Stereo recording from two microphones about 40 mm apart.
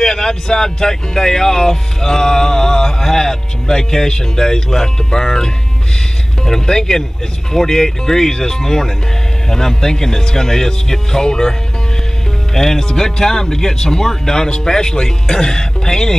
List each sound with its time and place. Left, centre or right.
0.0 s speech: centre
12.5 s speech: centre